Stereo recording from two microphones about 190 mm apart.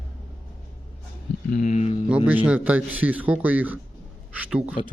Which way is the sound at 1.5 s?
40° left (ahead or behind).